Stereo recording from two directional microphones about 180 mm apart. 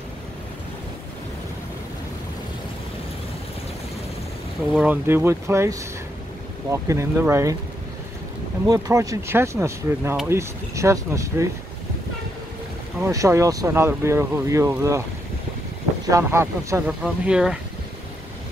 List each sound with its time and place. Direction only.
4.7 s speech: 10° right (ahead or behind)
8.6 s speech: 20° right (ahead or behind)
13.0 s speech: 15° right (ahead or behind)
16.1 s speech: 15° right (ahead or behind)
17.0 s speech: 5° right (ahead or behind)